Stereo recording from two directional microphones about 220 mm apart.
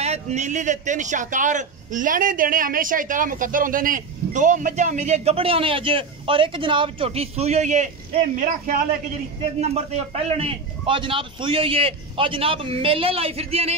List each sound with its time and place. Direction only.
0.0 s a man's voice: 30° right (ahead or behind)